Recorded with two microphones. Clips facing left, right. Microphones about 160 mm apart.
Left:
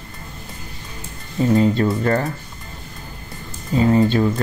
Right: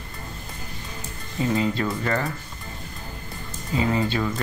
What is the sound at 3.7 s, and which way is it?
Speech, 40° left (ahead or behind).